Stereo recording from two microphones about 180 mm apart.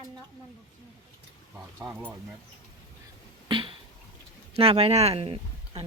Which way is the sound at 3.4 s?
30° right (ahead or behind).